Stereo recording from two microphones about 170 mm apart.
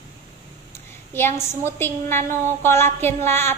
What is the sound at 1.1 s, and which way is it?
A woman's voice, 15° left (ahead or behind).